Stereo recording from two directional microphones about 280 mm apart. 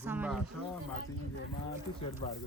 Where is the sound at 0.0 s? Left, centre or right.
Centre.